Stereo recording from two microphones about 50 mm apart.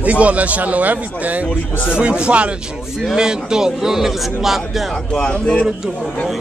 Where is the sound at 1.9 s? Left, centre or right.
Centre.